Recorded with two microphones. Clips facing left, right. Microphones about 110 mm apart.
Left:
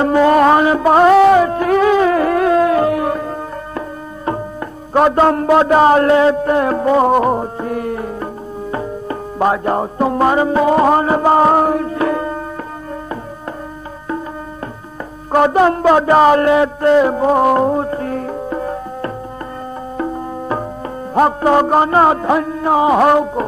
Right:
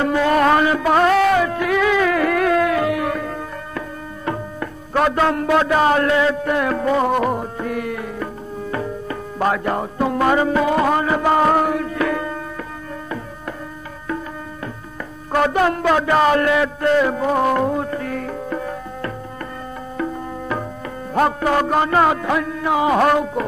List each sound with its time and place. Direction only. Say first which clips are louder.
0.0 s music: left 5 dB; 25° left (ahead or behind)
4.3 s speech: left 4 dB; 25° left (ahead or behind)
15.3 s a man's voice: left 5 dB; 25° left (ahead or behind)
17.0 s music: left 5 dB; 30° left (ahead or behind)
22.9 s a man's voice: left 4 dB; 25° left (ahead or behind)